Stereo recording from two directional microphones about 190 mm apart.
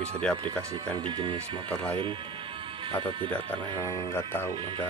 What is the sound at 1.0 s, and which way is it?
Speech, 25° right (ahead or behind).